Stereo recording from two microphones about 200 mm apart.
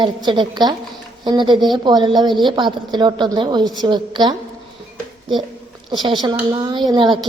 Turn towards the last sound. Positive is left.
turn(degrees=-20)  # may be behind; listen again after turning